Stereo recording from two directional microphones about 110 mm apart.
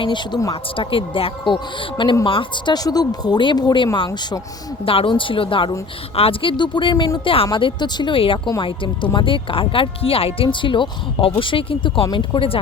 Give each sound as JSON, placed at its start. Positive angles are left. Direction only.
{"t": 0.0, "sound": "speech", "side_deg": 45}
{"t": 4.9, "sound": "speech", "side_deg": 55}